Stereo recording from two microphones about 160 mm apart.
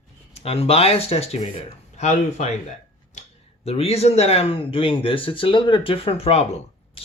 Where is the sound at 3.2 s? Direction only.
50° left (ahead or behind).